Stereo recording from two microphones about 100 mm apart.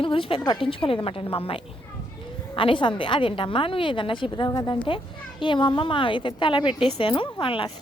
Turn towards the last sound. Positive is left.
turn(degrees=60)  # may be behind; listen again after turning